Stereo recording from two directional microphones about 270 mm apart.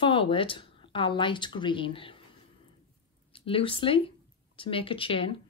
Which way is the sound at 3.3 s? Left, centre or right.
Centre.